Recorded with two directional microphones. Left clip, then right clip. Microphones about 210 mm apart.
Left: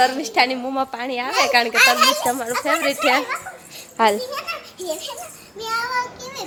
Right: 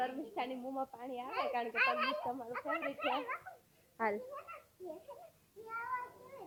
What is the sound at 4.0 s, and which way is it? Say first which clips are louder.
Speech: left 19 dB; 15° left (ahead or behind).